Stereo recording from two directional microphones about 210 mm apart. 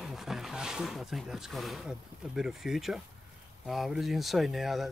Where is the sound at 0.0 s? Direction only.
Centre (ahead or behind).